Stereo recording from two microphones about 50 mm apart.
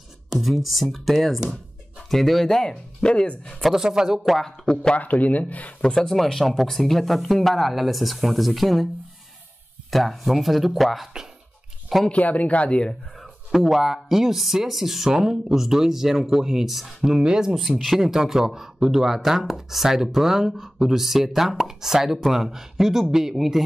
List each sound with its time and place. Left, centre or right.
0.3 s speech: centre
3.7 s speech: centre
4.4 s speech: centre
4.9 s speech: left
5.8 s speech: centre
6.1 s speech: centre
9.8 s speech: centre
12.1 s speech: left
13.2 s speech: centre
17.6 s speech: centre
18.0 s speech: centre